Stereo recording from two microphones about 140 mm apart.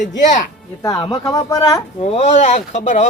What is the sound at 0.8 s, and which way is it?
Speech, 25° left (ahead or behind).